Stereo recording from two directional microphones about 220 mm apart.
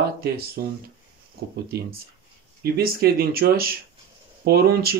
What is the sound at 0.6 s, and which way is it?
Speech, 45° right (ahead or behind).